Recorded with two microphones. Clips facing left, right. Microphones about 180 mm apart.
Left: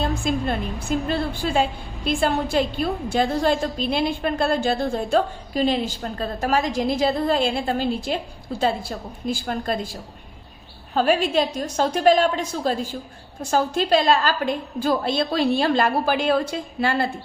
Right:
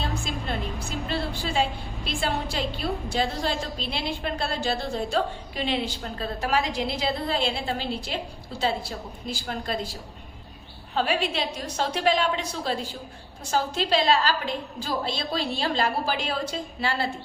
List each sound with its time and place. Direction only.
0.0 s a woman's voice: 50° left (ahead or behind)
10.9 s a woman's voice: 45° left (ahead or behind)